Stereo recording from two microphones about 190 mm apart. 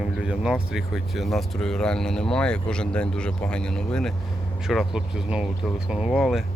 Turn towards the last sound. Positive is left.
turn(degrees=0)  # may be behind; listen again after turning